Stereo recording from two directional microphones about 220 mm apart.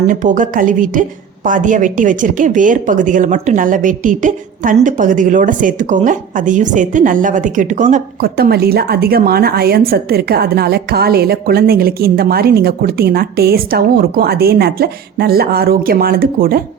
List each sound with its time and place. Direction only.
0.1 s speech: 35° right (ahead or behind)